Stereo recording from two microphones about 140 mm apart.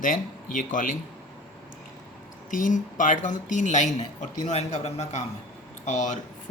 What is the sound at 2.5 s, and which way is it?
A woman's voice, 65° left (ahead or behind).